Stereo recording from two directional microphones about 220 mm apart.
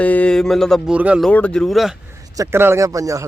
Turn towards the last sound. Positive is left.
turn(degrees=-15)  # may be behind; listen again after turning